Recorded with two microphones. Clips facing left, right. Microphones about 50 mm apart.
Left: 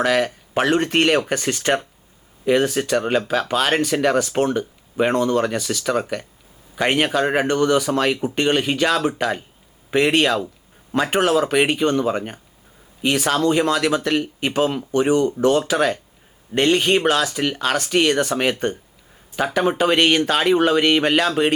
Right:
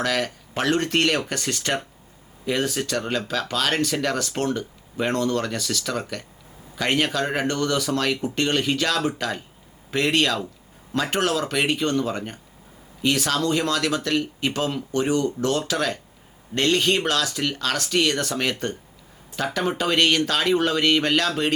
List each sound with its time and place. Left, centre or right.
0.0 s speech: left